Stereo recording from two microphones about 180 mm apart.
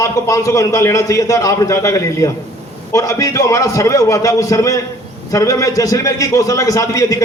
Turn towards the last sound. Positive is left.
turn(degrees=20)  # may be behind; listen again after turning